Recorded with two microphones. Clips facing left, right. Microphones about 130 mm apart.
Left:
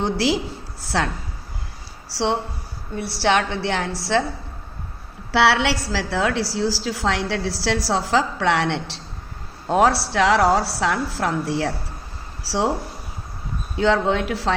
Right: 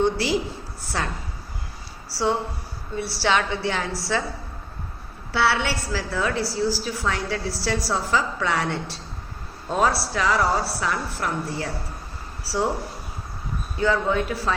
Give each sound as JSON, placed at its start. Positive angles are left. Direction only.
{"t": 0.0, "sound": "a woman's voice", "side_deg": 75}
{"t": 2.9, "sound": "a woman's voice", "side_deg": 55}
{"t": 5.3, "sound": "a woman's voice", "side_deg": 80}
{"t": 13.7, "sound": "a woman's voice", "side_deg": 75}